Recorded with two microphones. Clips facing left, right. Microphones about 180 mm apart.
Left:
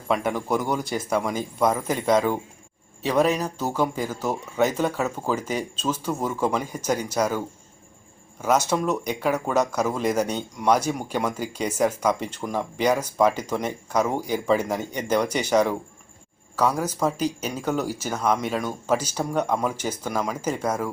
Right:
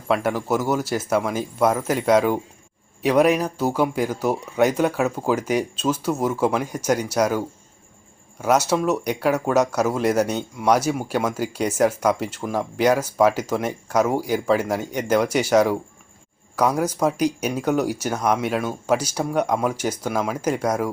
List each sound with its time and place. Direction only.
0.1 s speech: 5° right (ahead or behind)